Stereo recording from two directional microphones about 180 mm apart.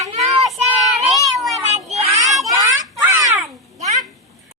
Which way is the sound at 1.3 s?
Centre (ahead or behind).